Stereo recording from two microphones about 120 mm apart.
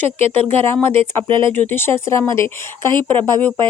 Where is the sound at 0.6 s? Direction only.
20° left (ahead or behind).